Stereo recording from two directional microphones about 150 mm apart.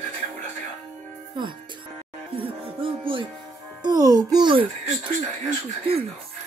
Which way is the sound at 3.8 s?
25° right (ahead or behind).